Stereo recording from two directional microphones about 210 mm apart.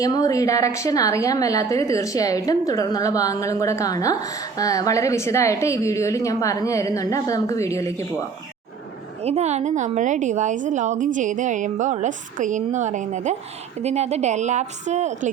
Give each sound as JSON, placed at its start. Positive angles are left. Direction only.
{"t": 0.0, "sound": "a woman's voice", "side_deg": 15}
{"t": 9.2, "sound": "a woman's voice", "side_deg": -30}